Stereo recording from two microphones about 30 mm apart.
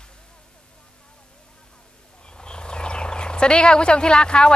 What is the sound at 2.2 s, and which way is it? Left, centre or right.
Speech, left.